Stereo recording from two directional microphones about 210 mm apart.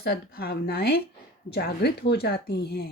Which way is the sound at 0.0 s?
50° left (ahead or behind).